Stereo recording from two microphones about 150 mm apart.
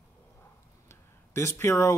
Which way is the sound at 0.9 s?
15° left (ahead or behind).